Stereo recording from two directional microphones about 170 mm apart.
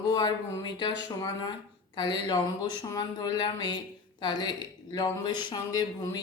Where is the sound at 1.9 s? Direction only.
25° left (ahead or behind).